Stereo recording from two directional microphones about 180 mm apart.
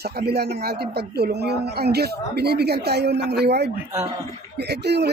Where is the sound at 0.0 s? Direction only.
60° right (ahead or behind).